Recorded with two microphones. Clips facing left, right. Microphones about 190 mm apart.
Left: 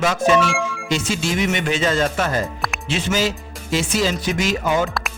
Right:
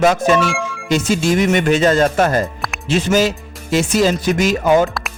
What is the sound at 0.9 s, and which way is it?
Speech, 45° right (ahead or behind).